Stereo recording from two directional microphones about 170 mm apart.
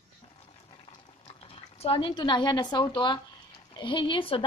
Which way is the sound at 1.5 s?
35° left (ahead or behind).